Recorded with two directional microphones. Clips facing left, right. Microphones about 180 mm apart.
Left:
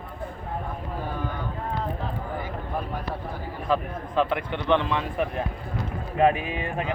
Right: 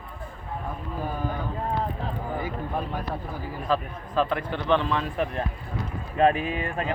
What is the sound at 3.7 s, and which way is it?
Speech, 15° left (ahead or behind).